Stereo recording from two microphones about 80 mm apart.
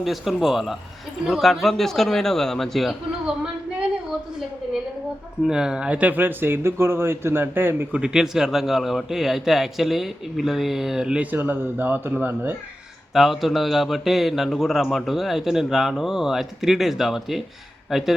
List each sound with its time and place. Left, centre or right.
0.0 s a man's voice: centre
5.4 s speech: centre; by 7.9 s right
7.9 s a man's voice: centre
13.1 s a man's voice: centre